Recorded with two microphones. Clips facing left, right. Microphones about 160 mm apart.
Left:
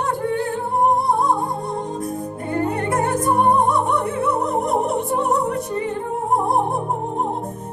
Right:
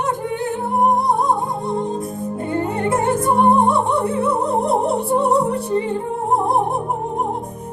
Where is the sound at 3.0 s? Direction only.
25° right (ahead or behind).